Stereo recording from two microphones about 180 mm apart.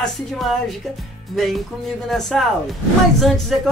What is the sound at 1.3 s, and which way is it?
Speech, centre (ahead or behind).